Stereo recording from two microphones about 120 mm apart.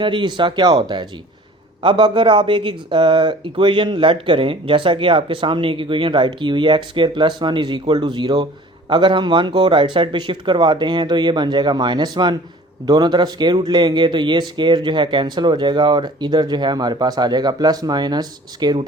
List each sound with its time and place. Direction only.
0.0 s speech: 40° right (ahead or behind)